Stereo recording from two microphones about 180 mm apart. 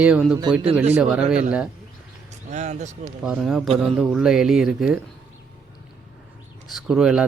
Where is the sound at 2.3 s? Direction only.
40° right (ahead or behind).